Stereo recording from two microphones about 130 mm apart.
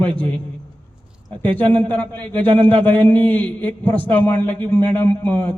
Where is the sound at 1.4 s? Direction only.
15° left (ahead or behind).